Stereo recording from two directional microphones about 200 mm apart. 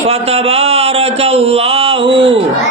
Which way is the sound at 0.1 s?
30° right (ahead or behind).